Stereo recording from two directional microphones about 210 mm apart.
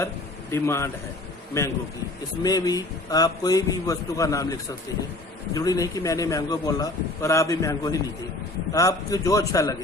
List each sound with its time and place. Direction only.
0.5 s a man's voice: 15° left (ahead or behind)